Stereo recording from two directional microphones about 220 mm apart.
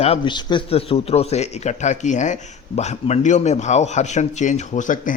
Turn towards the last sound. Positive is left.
turn(degrees=35)  # may be behind; listen again after turning